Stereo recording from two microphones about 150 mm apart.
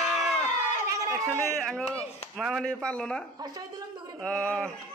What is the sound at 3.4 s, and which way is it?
Speech, 25° right (ahead or behind).